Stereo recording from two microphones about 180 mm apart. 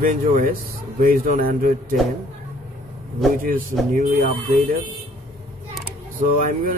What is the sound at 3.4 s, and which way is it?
Speech, 50° right (ahead or behind).